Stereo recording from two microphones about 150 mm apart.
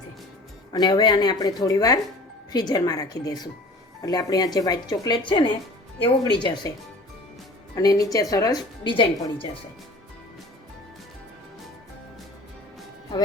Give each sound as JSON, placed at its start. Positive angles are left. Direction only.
{"t": 0.7, "sound": "a woman's voice", "side_deg": 30}
{"t": 7.8, "sound": "a woman's voice", "side_deg": 25}